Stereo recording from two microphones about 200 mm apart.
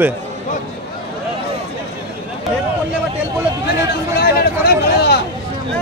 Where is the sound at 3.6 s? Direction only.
50° left (ahead or behind).